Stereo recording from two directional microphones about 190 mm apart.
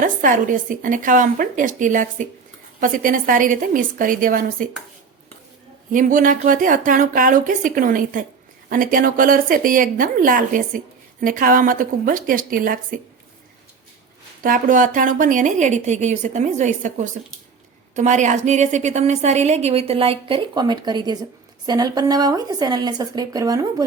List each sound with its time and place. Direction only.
0.0 s speech: 45° right (ahead or behind)
5.9 s speech: 45° right (ahead or behind)
14.4 s a woman's voice: 45° right (ahead or behind); by 23.8 s 20° right (ahead or behind)